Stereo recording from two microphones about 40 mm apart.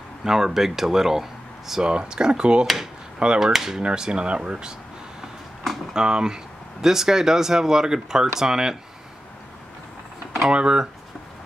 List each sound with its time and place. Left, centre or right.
0.2 s speech: centre
1.9 s speech: right
2.6 s speech: centre
3.2 s speech: right
3.5 s speech: centre
3.8 s speech: right
5.9 s speech: centre
10.5 s speech: right